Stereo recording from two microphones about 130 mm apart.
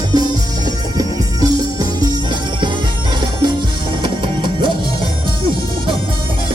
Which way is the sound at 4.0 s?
40° right (ahead or behind).